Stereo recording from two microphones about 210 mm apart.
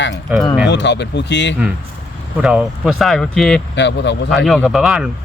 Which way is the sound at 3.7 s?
60° left (ahead or behind).